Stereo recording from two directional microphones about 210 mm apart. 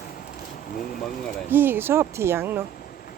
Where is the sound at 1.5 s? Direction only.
10° right (ahead or behind).